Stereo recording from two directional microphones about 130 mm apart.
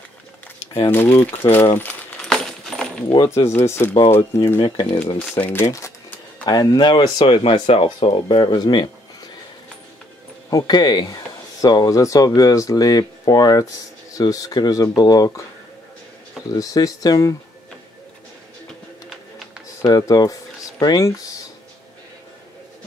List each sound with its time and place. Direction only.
0.9 s speech: 15° left (ahead or behind)
1.4 s coin: 15° left (ahead or behind)
3.3 s speech: 20° left (ahead or behind)
4.6 s speech: 40° left (ahead or behind)
5.3 s speech: 15° left (ahead or behind); by 8.4 s 50° left (ahead or behind)
8.4 s speech: 35° left (ahead or behind)
10.5 s speech: 35° left (ahead or behind)
16.5 s speech: 30° left (ahead or behind)
19.9 s speech: 30° left (ahead or behind)